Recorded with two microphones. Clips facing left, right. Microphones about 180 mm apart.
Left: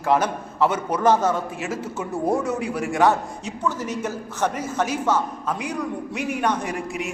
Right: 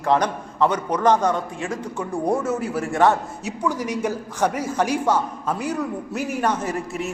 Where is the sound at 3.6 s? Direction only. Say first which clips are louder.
Right 2 dB; 10° right (ahead or behind).